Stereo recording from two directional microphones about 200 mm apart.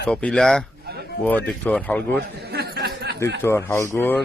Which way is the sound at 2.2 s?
55° right (ahead or behind).